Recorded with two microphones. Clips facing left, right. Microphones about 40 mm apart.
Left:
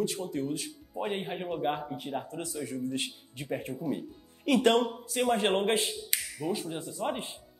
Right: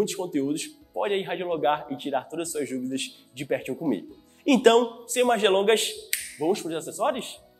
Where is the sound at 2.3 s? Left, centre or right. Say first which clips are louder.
Right 7 dB; right.